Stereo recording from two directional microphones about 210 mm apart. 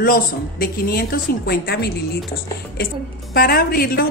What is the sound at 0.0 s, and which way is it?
A woman's voice, 45° left (ahead or behind).